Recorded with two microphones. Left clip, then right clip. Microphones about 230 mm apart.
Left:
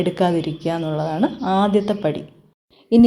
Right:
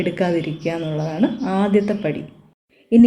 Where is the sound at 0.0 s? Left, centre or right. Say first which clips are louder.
Left 1 dB; left.